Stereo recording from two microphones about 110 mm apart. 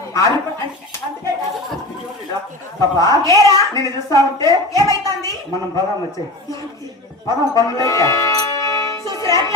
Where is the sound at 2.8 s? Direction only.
30° left (ahead or behind).